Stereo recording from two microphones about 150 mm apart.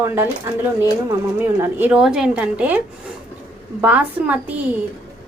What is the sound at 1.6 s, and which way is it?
A woman's voice, 10° right (ahead or behind).